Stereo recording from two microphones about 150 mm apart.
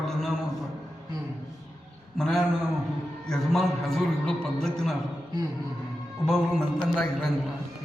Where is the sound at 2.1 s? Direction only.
Centre (ahead or behind).